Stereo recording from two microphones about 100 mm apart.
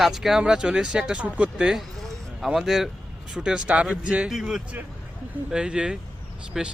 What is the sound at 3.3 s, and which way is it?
Speech, 10° right (ahead or behind).